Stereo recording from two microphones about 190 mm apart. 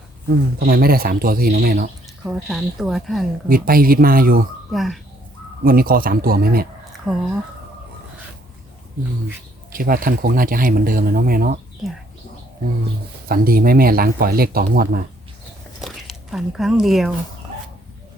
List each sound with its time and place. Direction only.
0.6 s speech: 50° right (ahead or behind)
2.2 s speech: centre (ahead or behind)
3.5 s speech: 50° right (ahead or behind)
4.7 s speech: centre (ahead or behind)
5.6 s speech: 50° right (ahead or behind)
7.1 s speech: 5° right (ahead or behind)
9.7 s speech: 50° right (ahead or behind)
13.2 s speech: 50° right (ahead or behind)
15.8 s speech: centre (ahead or behind)